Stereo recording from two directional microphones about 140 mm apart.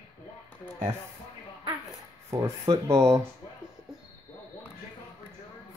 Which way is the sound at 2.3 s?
20° right (ahead or behind).